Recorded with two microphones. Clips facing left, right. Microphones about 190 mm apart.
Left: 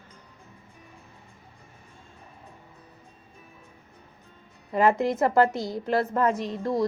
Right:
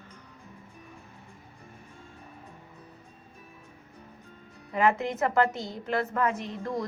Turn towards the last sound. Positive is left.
turn(degrees=35)  # may be behind; listen again after turning